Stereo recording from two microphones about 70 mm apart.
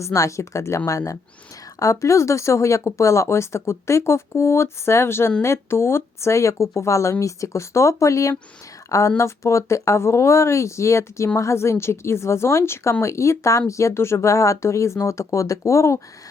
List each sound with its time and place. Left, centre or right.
0.0 s a woman's voice: left